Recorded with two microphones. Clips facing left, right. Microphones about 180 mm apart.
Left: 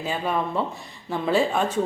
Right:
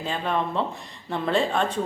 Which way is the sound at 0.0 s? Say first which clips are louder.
Left 1 dB; 5° left (ahead or behind).